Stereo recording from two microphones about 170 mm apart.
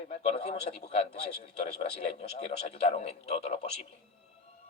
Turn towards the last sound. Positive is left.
turn(degrees=35)  # may be behind; listen again after turning